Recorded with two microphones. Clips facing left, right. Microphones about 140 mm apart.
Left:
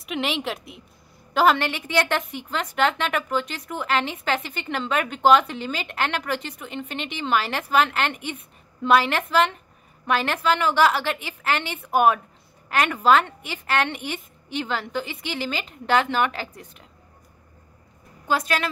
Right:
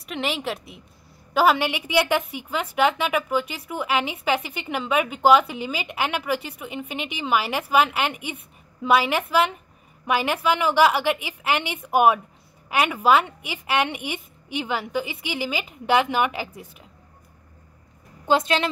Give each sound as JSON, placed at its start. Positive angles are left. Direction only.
{"t": 0.0, "sound": "a woman's voice", "side_deg": 0}
{"t": 18.2, "sound": "a woman's voice", "side_deg": -25}